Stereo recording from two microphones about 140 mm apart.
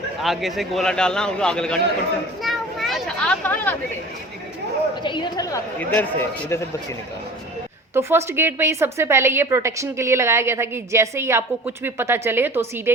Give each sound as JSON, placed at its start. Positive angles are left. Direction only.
{"t": 0.2, "sound": "a man's voice", "side_deg": 0}
{"t": 2.4, "sound": "a sound", "side_deg": 0}
{"t": 5.0, "sound": "chatter", "side_deg": 35}
{"t": 5.8, "sound": "a man's voice", "side_deg": 10}
{"t": 7.9, "sound": "a woman's voice", "side_deg": -15}